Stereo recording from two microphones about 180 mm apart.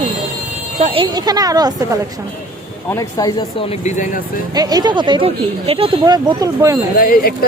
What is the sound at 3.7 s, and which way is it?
Speech, 40° left (ahead or behind).